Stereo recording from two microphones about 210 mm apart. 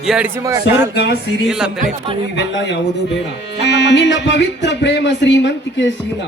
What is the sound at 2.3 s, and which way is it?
Speech, 55° left (ahead or behind).